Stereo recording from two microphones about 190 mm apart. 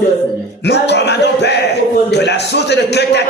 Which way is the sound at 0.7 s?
65° left (ahead or behind).